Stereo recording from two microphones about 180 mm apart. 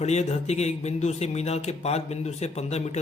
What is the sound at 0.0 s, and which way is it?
A man's voice, 35° left (ahead or behind).